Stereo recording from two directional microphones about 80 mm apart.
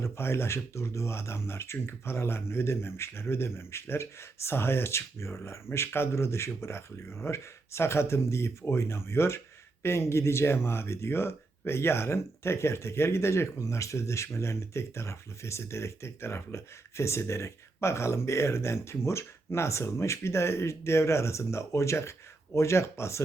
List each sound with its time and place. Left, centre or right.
0.0 s speech: left